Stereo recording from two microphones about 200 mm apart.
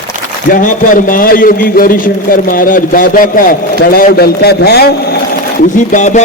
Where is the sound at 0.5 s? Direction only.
40° left (ahead or behind).